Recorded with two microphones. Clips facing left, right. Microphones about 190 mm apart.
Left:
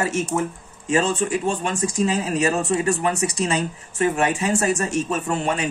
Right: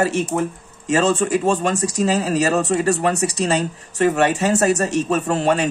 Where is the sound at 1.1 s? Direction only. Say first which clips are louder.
Right 4 dB; 45° right (ahead or behind).